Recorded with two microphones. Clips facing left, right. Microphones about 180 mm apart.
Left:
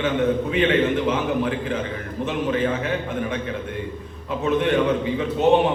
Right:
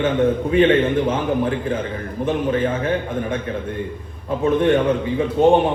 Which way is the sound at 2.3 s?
45° right (ahead or behind).